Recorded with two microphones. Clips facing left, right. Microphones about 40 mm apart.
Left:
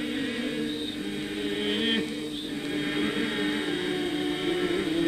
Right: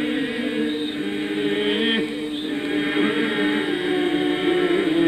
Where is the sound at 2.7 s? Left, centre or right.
Right.